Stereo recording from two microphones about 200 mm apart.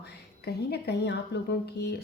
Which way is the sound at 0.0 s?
55° left (ahead or behind).